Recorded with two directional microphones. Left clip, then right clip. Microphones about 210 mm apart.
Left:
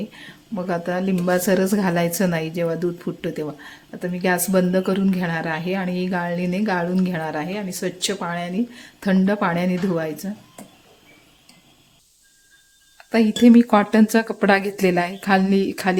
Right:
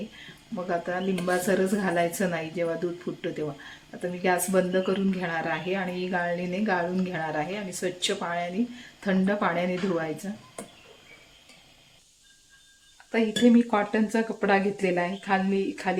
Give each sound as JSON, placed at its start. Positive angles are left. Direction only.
{"t": 0.5, "sound": "a woman's voice", "side_deg": 40}
{"t": 13.1, "sound": "a woman's voice", "side_deg": 50}